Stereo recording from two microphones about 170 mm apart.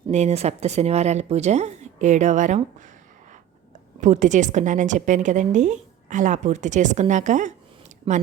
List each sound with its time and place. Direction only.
0.1 s speech: 40° right (ahead or behind)
4.0 s a woman's voice: 45° right (ahead or behind)